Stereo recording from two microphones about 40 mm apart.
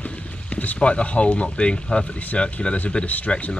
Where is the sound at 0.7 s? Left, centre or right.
Left.